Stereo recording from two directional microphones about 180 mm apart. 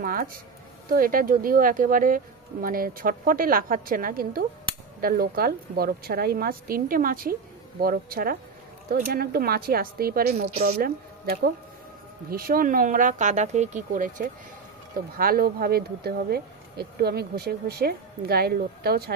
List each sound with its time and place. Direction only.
0.0 s speech: 50° right (ahead or behind)